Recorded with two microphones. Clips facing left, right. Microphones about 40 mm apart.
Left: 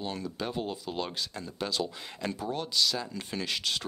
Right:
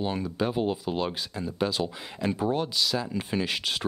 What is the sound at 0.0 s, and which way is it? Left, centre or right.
Speech, centre.